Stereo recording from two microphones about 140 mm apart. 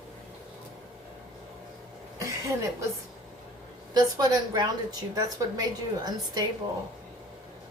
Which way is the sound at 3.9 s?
30° right (ahead or behind).